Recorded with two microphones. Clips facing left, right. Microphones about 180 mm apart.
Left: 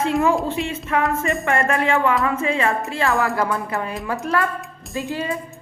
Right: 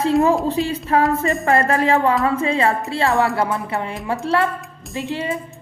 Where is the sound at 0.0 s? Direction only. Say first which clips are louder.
Right 3 dB; 35° right (ahead or behind).